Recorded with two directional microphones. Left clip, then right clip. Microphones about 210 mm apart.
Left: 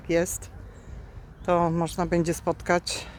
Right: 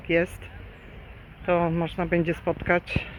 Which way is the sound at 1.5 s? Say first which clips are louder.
Even; 20° left (ahead or behind).